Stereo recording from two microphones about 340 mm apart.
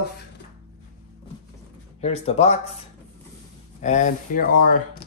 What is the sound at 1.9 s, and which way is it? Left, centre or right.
Speech, centre.